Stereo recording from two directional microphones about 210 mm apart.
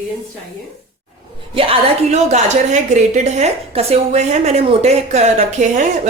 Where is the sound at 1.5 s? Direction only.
25° right (ahead or behind).